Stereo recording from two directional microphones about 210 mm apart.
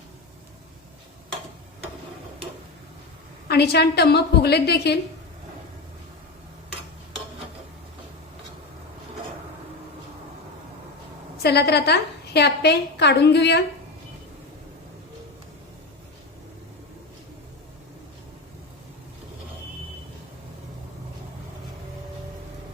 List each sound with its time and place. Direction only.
3.5 s a woman's voice: 50° left (ahead or behind)
11.4 s a woman's voice: 50° left (ahead or behind)